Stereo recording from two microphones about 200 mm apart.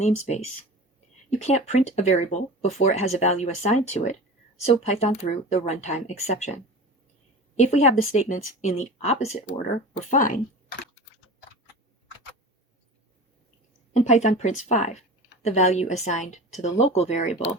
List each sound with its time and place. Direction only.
0.0 s speech: 35° left (ahead or behind)
7.5 s speech: 35° left (ahead or behind)
13.9 s speech: 35° left (ahead or behind)